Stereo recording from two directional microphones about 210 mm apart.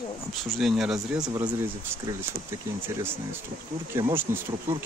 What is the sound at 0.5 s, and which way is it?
Speech, centre (ahead or behind).